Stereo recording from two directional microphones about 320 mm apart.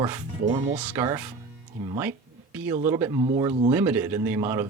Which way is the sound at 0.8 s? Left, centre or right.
Centre.